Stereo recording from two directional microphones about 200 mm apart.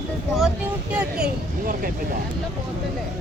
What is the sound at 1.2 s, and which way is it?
Speech, 45° right (ahead or behind).